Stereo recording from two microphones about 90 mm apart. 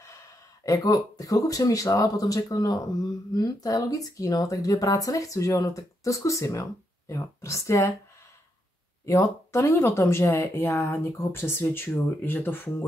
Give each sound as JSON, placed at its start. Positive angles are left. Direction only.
{"t": 0.7, "sound": "speech", "side_deg": 40}
{"t": 9.0, "sound": "speech", "side_deg": 35}